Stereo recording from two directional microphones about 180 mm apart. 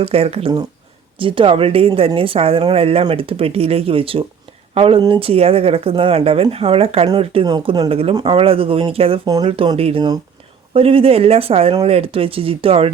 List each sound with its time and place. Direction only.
0.0 s speech: 30° right (ahead or behind)